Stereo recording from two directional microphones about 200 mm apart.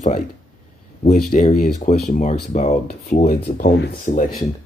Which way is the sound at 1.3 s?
40° left (ahead or behind).